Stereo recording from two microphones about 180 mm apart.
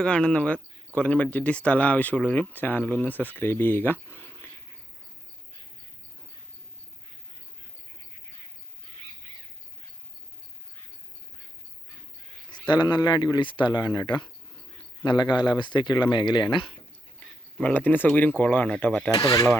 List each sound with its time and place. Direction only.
0.0 s speech: 5° left (ahead or behind)
12.6 s speech: 25° left (ahead or behind)
17.6 s speech: 10° left (ahead or behind)
19.1 s speech: 20° left (ahead or behind)